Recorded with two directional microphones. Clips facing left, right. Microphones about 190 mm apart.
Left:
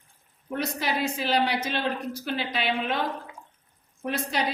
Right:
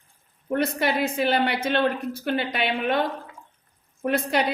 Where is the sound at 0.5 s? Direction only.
60° right (ahead or behind).